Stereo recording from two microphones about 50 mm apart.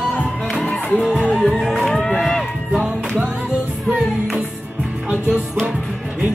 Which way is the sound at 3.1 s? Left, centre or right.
Right.